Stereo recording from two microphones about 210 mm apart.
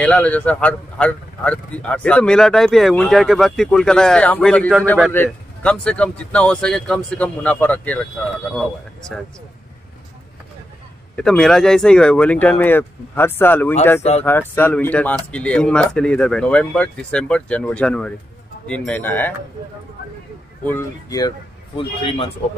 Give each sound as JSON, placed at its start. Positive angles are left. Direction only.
{"t": 0.0, "sound": "a man's voice", "side_deg": 5}
{"t": 11.1, "sound": "speech", "side_deg": 5}
{"t": 14.0, "sound": "speech", "side_deg": 30}
{"t": 14.5, "sound": "a man's voice", "side_deg": 10}
{"t": 20.6, "sound": "speech", "side_deg": 15}
{"t": 21.7, "sound": "a man's voice", "side_deg": 25}